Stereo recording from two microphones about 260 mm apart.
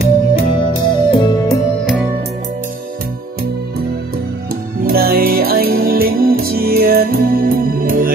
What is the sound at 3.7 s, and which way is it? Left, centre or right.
Music, right.